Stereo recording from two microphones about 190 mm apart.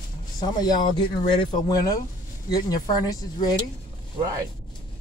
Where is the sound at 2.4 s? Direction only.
20° left (ahead or behind).